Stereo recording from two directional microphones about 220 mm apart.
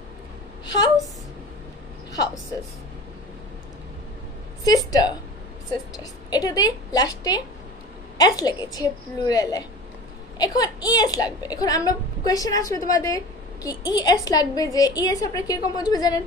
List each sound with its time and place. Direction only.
4.6 s a woman's voice: 15° left (ahead or behind)
6.3 s a woman's voice: 15° left (ahead or behind)